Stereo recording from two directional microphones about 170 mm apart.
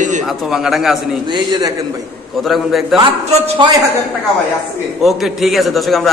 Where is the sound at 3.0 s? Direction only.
30° right (ahead or behind).